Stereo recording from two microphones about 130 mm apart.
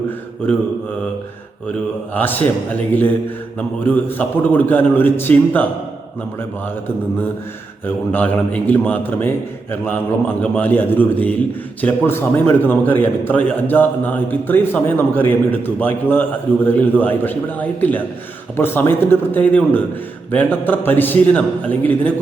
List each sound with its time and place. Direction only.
2.1 s a man's voice: 15° left (ahead or behind)
8.1 s a man's voice: 15° left (ahead or behind)